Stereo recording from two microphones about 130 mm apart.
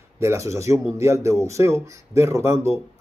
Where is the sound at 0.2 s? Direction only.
20° right (ahead or behind).